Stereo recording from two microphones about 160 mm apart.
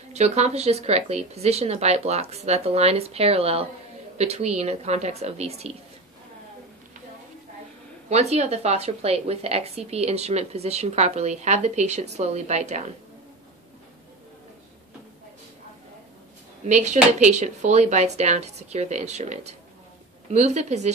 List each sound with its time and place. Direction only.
0.1 s a woman's voice: 45° right (ahead or behind)
8.1 s a woman's voice: 40° right (ahead or behind)
16.6 s a woman's voice: 45° right (ahead or behind)